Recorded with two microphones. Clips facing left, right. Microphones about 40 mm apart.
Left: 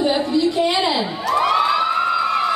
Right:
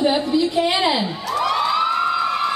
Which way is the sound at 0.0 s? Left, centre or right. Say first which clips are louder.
Even; centre.